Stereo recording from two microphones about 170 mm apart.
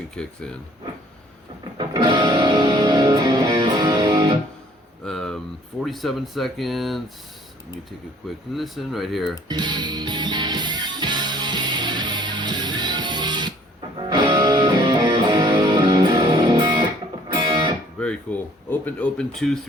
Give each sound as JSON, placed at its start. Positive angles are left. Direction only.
{"t": 0.2, "sound": "speech", "side_deg": 5}
{"t": 1.8, "sound": "music", "side_deg": -25}
{"t": 5.0, "sound": "a sound", "side_deg": 5}
{"t": 5.8, "sound": "speech", "side_deg": 0}
{"t": 8.5, "sound": "speech", "side_deg": 0}
{"t": 9.5, "sound": "music", "side_deg": -25}
{"t": 18.0, "sound": "a sound", "side_deg": 5}